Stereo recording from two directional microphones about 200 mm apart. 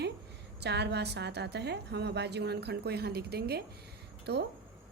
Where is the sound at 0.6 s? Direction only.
55° right (ahead or behind).